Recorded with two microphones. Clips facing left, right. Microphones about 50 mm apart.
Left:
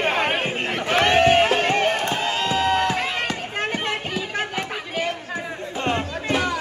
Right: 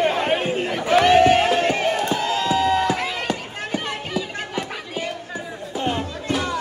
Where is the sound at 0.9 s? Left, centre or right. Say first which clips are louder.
Right 3 dB; centre.